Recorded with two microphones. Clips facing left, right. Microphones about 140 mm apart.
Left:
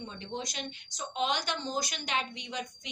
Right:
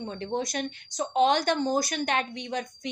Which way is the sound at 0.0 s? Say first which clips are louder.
Right 8 dB; 55° right (ahead or behind).